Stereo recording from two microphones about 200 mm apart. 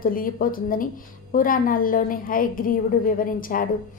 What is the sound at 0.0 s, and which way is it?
A woman's voice, 45° left (ahead or behind).